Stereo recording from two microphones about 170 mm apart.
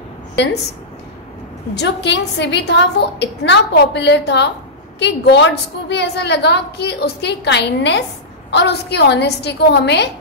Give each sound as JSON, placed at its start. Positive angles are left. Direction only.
{"t": 1.8, "sound": "a woman's voice", "side_deg": 85}